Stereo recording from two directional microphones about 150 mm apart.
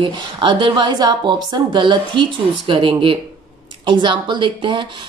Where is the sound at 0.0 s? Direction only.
35° right (ahead or behind).